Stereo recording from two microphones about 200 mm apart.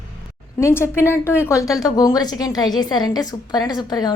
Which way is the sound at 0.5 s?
10° left (ahead or behind).